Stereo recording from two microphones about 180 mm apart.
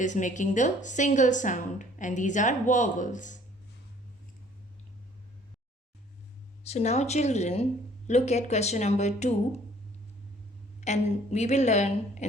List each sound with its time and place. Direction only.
0.0 s a woman's voice: 45° left (ahead or behind)
6.7 s speech: 40° left (ahead or behind)
10.8 s speech: 40° left (ahead or behind)